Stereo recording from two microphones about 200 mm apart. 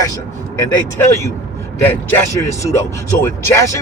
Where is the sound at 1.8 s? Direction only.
10° left (ahead or behind).